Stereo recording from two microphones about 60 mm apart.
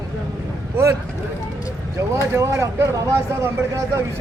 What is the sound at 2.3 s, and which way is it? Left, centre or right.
Speech, right.